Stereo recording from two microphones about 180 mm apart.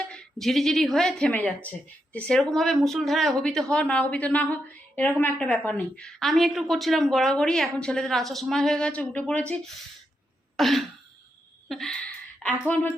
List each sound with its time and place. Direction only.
0.1 s speech: 5° left (ahead or behind)
10.6 s speech: centre (ahead or behind)
11.7 s a sound: 5° left (ahead or behind)